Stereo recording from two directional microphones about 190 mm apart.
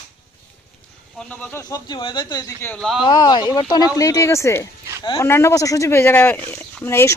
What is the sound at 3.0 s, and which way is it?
Speech, 20° left (ahead or behind).